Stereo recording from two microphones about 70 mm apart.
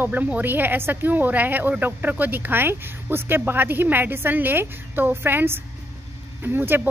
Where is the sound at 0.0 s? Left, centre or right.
Right.